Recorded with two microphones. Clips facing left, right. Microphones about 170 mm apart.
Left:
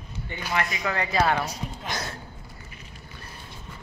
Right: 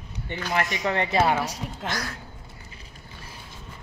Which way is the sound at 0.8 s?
25° right (ahead or behind).